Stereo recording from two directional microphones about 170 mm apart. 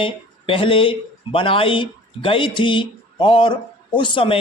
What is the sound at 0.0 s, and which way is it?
A man's voice, 30° left (ahead or behind).